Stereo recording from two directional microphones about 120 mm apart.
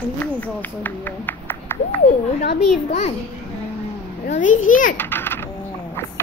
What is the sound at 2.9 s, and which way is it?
Speech, 65° left (ahead or behind).